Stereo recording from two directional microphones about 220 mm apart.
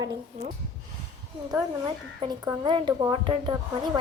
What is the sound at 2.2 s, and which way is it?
Speech, 20° right (ahead or behind).